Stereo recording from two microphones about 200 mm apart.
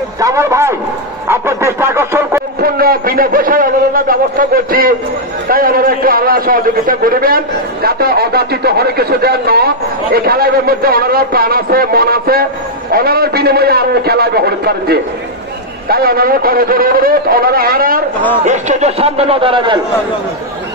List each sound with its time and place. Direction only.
0.2 s a man's voice: 15° right (ahead or behind)
1.2 s a sound: 10° right (ahead or behind)
2.6 s a man's voice: 50° right (ahead or behind)
18.4 s a man's voice: 35° right (ahead or behind)